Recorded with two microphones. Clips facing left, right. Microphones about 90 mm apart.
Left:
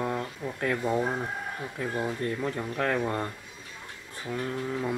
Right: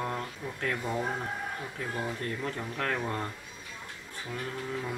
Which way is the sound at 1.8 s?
10° left (ahead or behind).